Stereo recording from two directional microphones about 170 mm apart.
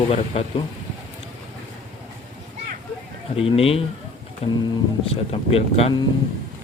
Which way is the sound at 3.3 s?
35° left (ahead or behind).